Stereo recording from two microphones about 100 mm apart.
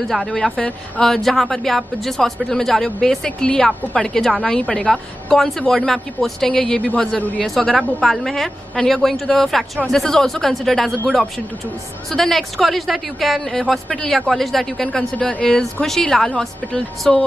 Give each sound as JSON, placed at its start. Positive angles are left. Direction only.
{"t": 0.1, "sound": "a woman's voice", "side_deg": 0}
{"t": 7.4, "sound": "speech", "side_deg": 5}